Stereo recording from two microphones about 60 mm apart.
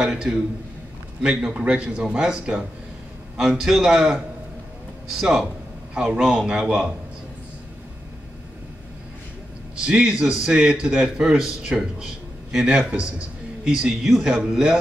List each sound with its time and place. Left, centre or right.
0.0 s a man's voice: centre
9.8 s a man's voice: centre